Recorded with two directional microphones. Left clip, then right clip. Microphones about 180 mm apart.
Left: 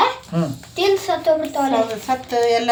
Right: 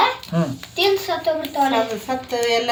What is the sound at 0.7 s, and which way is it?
Speech, 30° left (ahead or behind).